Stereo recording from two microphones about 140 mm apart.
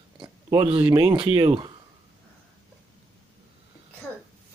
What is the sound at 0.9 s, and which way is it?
Speech, 20° right (ahead or behind).